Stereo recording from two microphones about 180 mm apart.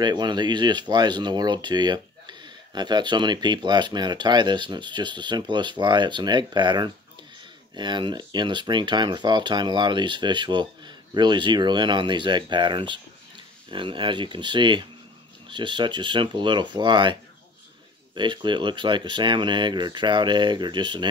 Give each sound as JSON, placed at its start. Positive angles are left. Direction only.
{"t": 0.0, "sound": "speech", "side_deg": -25}